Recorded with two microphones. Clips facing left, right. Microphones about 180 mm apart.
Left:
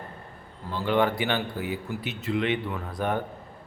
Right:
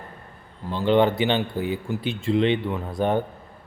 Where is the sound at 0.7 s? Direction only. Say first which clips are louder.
Right 5 dB; 25° right (ahead or behind).